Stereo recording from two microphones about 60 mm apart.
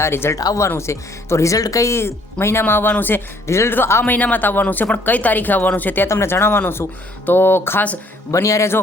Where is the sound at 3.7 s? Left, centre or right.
Left.